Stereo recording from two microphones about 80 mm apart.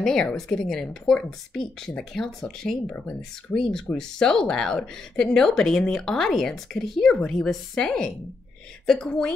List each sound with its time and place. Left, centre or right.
0.0 s speech: centre
3.9 s speech: left
4.2 s speech: centre